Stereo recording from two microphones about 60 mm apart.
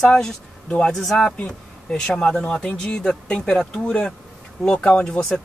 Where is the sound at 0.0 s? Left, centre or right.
Centre.